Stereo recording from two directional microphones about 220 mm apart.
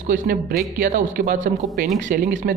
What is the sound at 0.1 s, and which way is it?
Speech, 45° right (ahead or behind).